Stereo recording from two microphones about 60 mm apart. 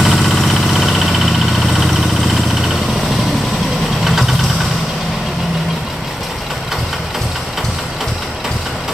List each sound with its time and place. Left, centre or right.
0.0 s engine: centre
4.0 s vehicle: centre